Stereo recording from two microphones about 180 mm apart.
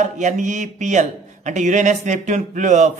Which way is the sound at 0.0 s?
45° right (ahead or behind).